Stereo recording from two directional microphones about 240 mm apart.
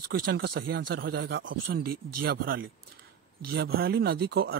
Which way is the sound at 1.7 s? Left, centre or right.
Right.